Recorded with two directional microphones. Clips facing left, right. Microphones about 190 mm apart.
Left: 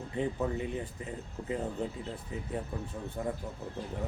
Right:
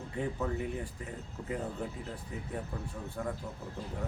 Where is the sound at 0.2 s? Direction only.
20° left (ahead or behind).